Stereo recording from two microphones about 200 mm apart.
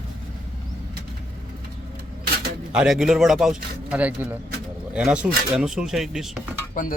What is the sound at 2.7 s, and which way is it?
A man's voice, 5° right (ahead or behind).